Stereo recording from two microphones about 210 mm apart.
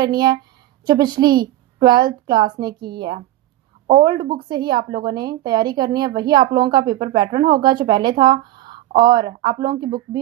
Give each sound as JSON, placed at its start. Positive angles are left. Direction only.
{"t": 0.0, "sound": "a woman's voice", "side_deg": -20}